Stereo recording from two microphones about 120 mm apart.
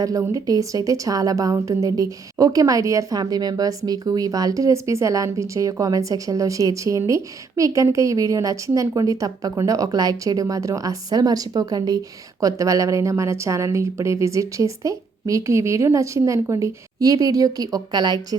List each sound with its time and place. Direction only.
0.0 s a woman's voice: 30° right (ahead or behind)